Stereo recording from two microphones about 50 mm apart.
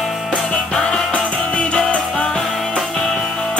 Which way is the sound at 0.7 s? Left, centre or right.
Centre.